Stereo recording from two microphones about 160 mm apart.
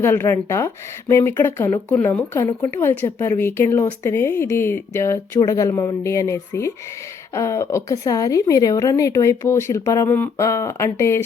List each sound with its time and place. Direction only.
0.0 s a woman's voice: 15° left (ahead or behind)